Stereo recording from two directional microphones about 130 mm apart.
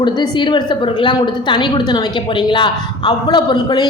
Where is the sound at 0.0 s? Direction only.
35° left (ahead or behind).